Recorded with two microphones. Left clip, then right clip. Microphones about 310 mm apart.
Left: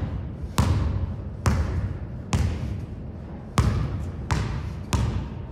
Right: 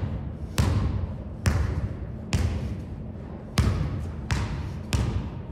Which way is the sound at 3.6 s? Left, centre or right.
Left.